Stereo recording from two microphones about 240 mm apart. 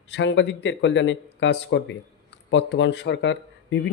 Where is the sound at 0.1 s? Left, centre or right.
Left.